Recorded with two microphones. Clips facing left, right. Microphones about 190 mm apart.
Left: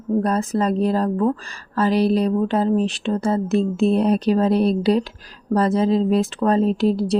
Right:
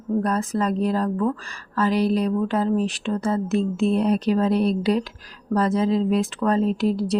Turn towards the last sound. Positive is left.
turn(degrees=30)  # may be behind; listen again after turning